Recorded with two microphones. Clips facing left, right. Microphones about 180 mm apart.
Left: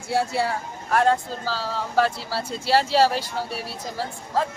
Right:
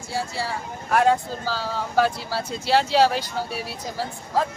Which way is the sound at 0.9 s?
5° right (ahead or behind).